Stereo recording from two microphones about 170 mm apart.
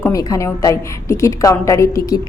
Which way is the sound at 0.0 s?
20° left (ahead or behind).